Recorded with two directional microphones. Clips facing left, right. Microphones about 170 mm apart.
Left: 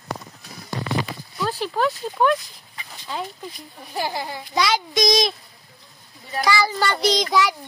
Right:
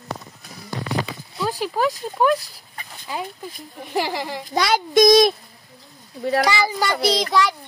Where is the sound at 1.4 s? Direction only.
10° right (ahead or behind).